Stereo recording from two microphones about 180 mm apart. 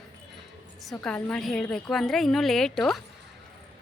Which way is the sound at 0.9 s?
5° left (ahead or behind).